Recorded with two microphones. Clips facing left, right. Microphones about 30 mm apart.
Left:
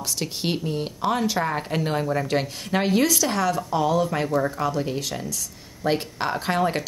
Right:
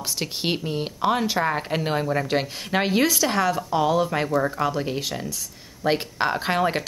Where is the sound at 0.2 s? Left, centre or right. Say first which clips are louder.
Right 1 dB; centre.